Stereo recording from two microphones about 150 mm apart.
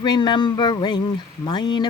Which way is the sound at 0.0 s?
30° left (ahead or behind).